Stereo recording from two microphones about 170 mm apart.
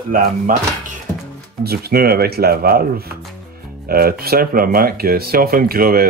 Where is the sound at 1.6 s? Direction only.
65° right (ahead or behind).